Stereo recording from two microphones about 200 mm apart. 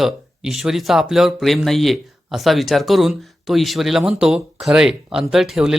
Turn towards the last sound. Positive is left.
turn(degrees=0)  # may be behind; listen again after turning